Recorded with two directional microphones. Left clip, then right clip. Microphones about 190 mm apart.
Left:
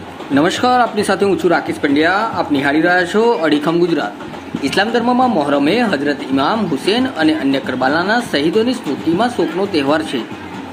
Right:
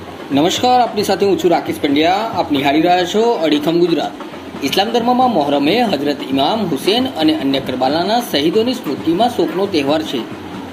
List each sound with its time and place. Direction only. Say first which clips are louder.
0.3 s speech: even; 25° left (ahead or behind)